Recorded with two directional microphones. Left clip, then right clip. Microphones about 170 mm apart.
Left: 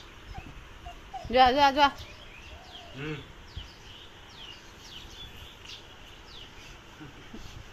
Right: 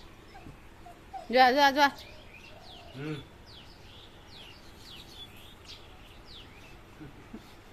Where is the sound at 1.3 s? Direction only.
15° right (ahead or behind).